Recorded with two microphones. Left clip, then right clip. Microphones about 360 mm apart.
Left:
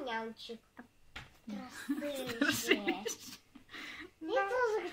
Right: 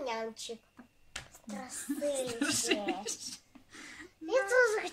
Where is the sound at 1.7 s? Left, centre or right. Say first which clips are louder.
Right 5 dB; centre.